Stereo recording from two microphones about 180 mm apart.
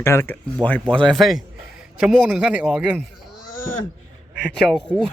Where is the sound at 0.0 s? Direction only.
15° left (ahead or behind).